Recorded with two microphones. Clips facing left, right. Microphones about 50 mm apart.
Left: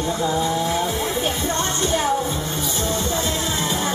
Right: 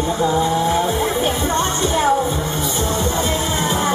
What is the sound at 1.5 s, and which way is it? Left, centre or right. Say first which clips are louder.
Music: right 4 dB; centre.